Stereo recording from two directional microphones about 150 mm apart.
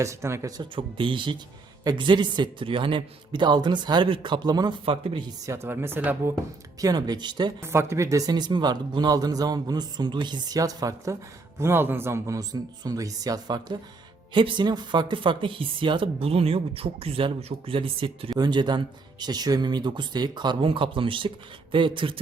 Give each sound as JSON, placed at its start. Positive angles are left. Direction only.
{"t": 0.0, "sound": "speech", "side_deg": -20}
{"t": 5.5, "sound": "speech", "side_deg": -15}
{"t": 6.7, "sound": "speech", "side_deg": -25}
{"t": 7.6, "sound": "speech", "side_deg": -15}